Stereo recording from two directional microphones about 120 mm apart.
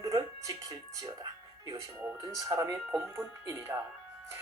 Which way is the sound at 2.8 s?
15° right (ahead or behind).